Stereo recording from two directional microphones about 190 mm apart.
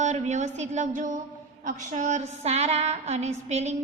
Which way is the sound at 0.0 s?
40° right (ahead or behind).